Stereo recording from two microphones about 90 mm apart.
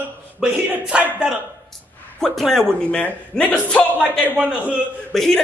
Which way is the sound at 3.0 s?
20° left (ahead or behind).